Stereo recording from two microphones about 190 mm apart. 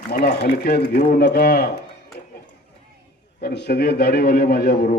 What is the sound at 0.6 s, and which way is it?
A man's voice, 55° left (ahead or behind).